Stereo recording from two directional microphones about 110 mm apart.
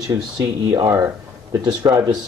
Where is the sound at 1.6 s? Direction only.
40° right (ahead or behind).